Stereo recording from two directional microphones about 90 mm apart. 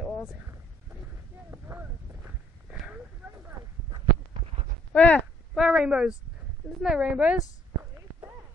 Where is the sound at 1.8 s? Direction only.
15° right (ahead or behind).